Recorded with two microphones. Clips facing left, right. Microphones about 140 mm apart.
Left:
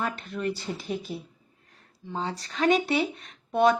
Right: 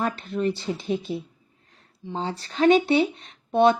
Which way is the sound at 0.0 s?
30° right (ahead or behind).